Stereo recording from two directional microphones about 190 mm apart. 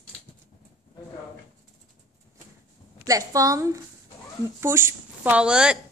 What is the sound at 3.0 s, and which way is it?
A woman's voice, 15° right (ahead or behind).